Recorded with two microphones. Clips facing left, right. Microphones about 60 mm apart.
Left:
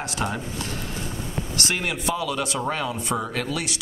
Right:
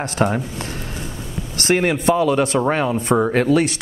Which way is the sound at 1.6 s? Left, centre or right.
Right.